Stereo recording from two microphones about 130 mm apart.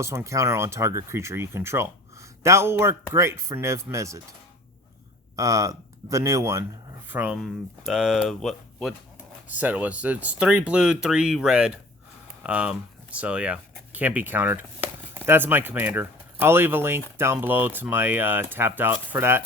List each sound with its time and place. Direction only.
0.0 s speech: 20° right (ahead or behind)
5.4 s speech: 25° right (ahead or behind)
7.1 s speech: 10° right (ahead or behind)
9.5 s speech: 10° right (ahead or behind)